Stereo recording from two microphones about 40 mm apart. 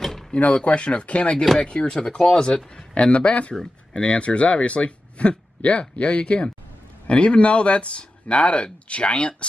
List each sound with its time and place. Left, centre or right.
0.3 s speech: left
0.7 s speech: left